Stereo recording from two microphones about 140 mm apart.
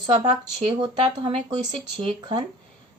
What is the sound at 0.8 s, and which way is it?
Speech, 35° right (ahead or behind).